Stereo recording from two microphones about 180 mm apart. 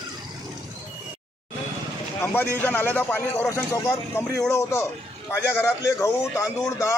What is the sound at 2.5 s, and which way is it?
A man's voice, 10° left (ahead or behind).